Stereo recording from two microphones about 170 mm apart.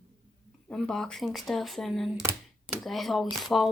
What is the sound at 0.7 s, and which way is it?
A woman's voice, 5° left (ahead or behind).